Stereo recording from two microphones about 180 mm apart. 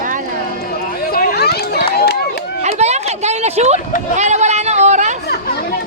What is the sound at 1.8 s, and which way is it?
Run, 60° left (ahead or behind).